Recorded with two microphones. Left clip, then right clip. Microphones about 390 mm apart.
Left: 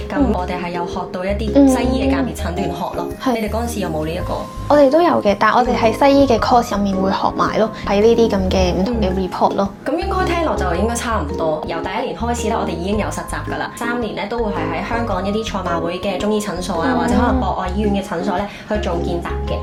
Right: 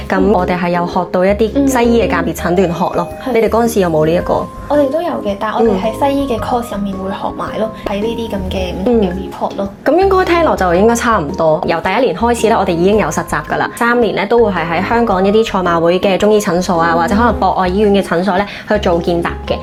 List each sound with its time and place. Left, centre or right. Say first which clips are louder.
0.1 s a woman's voice: right 7 dB; right
4.7 s speech: left 2 dB; left
9.8 s speech: right 14 dB; right